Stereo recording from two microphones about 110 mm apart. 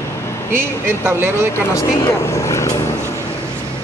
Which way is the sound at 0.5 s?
20° right (ahead or behind).